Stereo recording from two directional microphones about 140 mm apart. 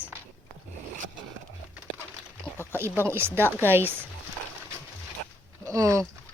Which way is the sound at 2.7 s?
15° right (ahead or behind).